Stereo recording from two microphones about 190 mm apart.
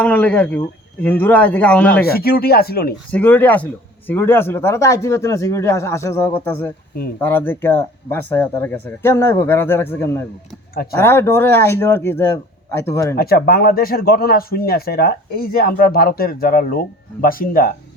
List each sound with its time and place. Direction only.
0.0 s speech: 5° left (ahead or behind)
2.0 s speech: 55° left (ahead or behind)
3.1 s speech: 10° left (ahead or behind)
13.1 s speech: 55° left (ahead or behind)